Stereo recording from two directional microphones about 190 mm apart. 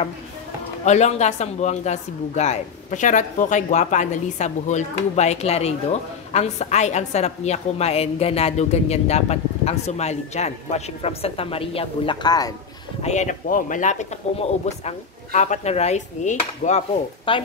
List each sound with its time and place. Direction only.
0.8 s speech: 35° left (ahead or behind); by 12.5 s 20° left (ahead or behind)
13.0 s speech: 40° left (ahead or behind)